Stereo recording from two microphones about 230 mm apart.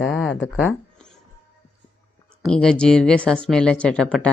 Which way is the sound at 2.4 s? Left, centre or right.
Centre.